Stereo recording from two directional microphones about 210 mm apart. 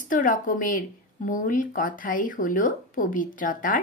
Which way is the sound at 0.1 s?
40° left (ahead or behind).